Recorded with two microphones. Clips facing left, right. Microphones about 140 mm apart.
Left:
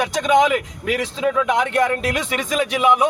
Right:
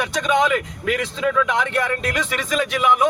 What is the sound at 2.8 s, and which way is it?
Speech, 20° left (ahead or behind).